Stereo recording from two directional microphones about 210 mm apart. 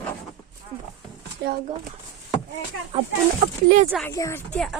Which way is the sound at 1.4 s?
55° right (ahead or behind).